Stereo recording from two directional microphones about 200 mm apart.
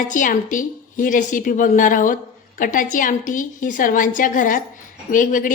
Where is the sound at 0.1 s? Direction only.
40° left (ahead or behind).